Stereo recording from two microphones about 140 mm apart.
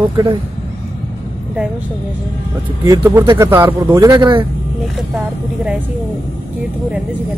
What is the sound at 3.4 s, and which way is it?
A man's voice, 15° right (ahead or behind).